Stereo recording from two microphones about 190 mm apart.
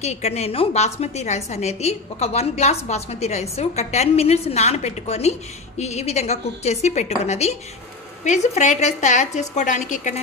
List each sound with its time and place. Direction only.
0.0 s a woman's voice: 35° left (ahead or behind)